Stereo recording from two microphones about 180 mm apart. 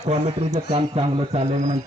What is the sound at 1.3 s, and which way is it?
Speech, 40° right (ahead or behind).